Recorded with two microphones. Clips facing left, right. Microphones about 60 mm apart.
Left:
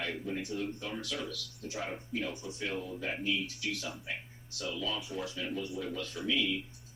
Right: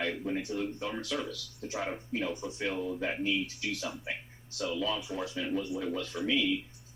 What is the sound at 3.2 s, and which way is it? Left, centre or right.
Speech, right.